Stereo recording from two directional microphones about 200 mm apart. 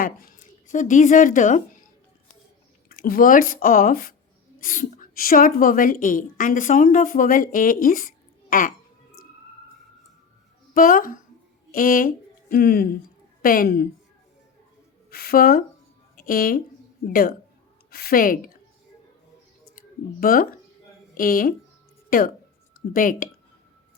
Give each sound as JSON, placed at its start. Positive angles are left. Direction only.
{"t": 0.7, "sound": "a woman's voice", "side_deg": 40}
{"t": 2.9, "sound": "speech", "side_deg": 45}
{"t": 10.8, "sound": "speech", "side_deg": 45}
{"t": 15.1, "sound": "a woman's voice", "side_deg": 50}
{"t": 19.7, "sound": "speech", "side_deg": 45}
{"t": 22.9, "sound": "speech", "side_deg": 45}